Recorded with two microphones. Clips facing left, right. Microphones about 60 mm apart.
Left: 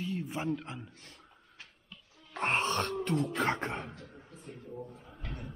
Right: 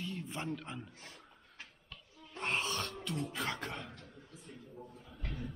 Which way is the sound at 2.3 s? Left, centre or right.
Left.